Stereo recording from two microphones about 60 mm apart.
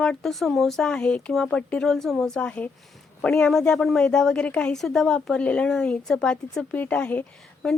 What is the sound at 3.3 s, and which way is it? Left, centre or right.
Speech, centre.